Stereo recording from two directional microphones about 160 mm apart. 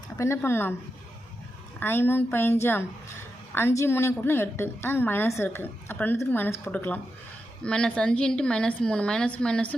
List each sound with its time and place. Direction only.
0.2 s a woman's voice: 15° left (ahead or behind)
1.8 s a woman's voice: 15° left (ahead or behind)